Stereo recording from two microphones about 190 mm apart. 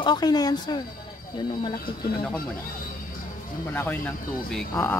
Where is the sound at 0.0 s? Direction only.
20° left (ahead or behind).